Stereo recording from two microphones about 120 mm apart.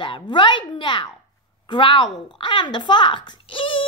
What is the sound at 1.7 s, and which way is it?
A woman's voice, 40° left (ahead or behind).